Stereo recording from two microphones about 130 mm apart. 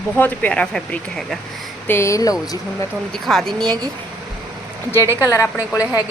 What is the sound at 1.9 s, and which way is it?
Speech, 20° left (ahead or behind).